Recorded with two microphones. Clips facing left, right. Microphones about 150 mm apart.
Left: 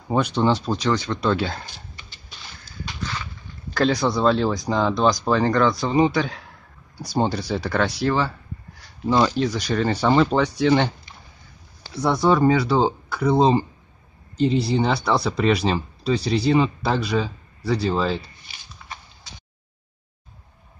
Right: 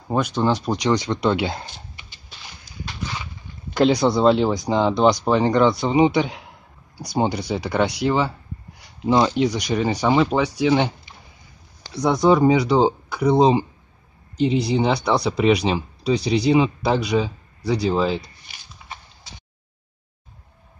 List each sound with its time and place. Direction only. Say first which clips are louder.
0.1 s speech: even; 5° right (ahead or behind)
2.8 s horse: even; 10° right (ahead or behind)
3.7 s speech: right 3 dB; 20° right (ahead or behind)
11.9 s speech: right 2 dB; 15° right (ahead or behind)